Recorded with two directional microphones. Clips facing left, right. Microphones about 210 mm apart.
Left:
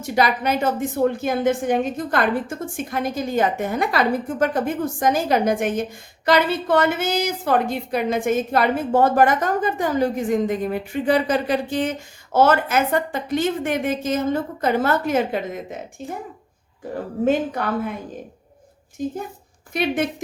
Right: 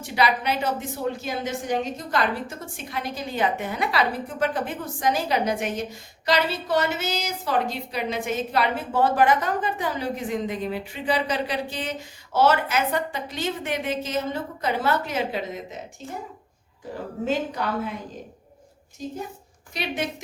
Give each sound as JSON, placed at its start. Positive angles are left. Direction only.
{"t": 0.0, "sound": "a woman's voice", "side_deg": 45}
{"t": 17.2, "sound": "a woman's voice", "side_deg": 55}
{"t": 19.0, "sound": "a woman's voice", "side_deg": 55}